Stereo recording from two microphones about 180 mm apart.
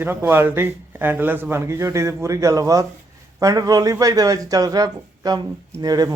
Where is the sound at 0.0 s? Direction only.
10° right (ahead or behind).